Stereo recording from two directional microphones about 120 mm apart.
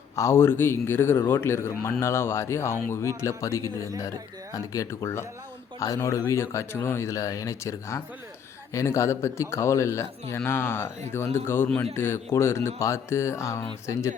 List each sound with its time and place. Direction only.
0.2 s a man's voice: 20° left (ahead or behind)